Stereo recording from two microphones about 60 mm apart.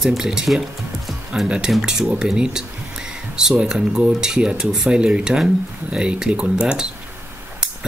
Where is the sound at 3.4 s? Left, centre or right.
Centre.